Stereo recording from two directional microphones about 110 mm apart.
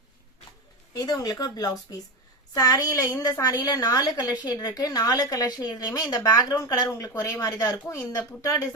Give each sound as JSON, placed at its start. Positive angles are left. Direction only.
{"t": 0.9, "sound": "a woman's voice", "side_deg": 35}